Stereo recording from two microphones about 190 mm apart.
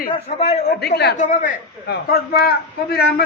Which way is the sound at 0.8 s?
60° left (ahead or behind).